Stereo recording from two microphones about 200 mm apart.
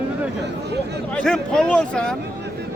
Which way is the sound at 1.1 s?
5° left (ahead or behind).